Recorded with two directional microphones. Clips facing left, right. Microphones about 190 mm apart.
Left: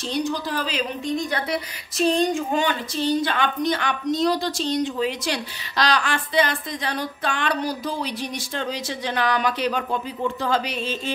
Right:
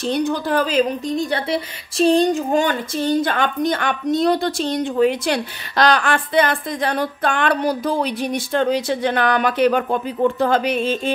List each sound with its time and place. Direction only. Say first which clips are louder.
0.0 s a woman's voice: right 5 dB; 55° right (ahead or behind)